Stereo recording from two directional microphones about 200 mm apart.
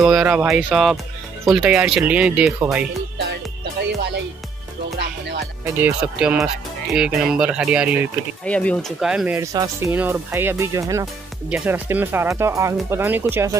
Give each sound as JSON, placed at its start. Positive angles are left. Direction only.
{"t": 0.0, "sound": "speech", "side_deg": -5}
{"t": 5.8, "sound": "speech", "side_deg": -5}
{"t": 8.5, "sound": "speech", "side_deg": 5}